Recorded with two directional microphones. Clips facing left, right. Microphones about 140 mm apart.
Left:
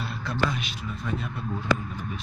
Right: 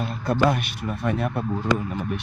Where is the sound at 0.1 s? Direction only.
50° right (ahead or behind).